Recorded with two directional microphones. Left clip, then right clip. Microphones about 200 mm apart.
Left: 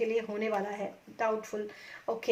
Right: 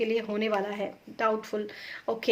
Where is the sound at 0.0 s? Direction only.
35° right (ahead or behind).